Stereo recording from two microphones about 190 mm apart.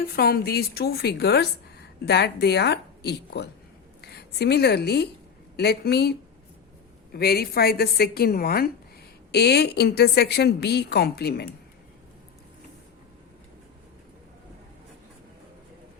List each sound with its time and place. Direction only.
0.1 s a woman's voice: 55° left (ahead or behind)